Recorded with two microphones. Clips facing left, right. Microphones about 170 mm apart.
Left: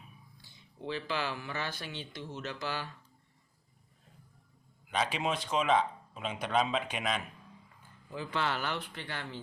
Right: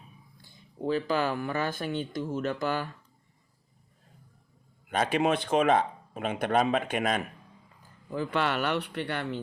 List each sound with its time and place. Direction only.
0.4 s speech: 45° right (ahead or behind)
4.9 s speech: 50° right (ahead or behind)